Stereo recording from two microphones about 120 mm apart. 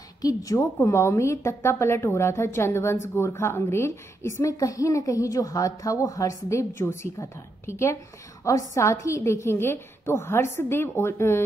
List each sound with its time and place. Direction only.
0.2 s a woman's voice: 30° left (ahead or behind)